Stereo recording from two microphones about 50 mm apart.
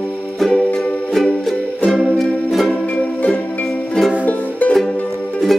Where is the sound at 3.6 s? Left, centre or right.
Centre.